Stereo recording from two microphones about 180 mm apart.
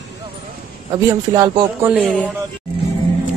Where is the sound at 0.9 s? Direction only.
20° right (ahead or behind).